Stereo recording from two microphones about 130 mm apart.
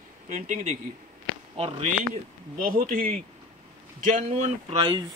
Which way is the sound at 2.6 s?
90° right.